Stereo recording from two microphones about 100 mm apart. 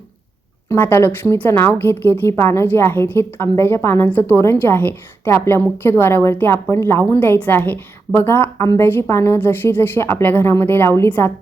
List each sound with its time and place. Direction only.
0.7 s a woman's voice: 25° left (ahead or behind)